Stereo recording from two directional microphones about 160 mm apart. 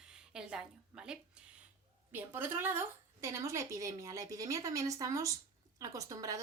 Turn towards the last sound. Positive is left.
turn(degrees=-20)  # may be behind; listen again after turning